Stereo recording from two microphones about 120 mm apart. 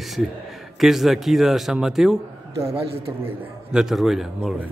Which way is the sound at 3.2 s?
10° right (ahead or behind).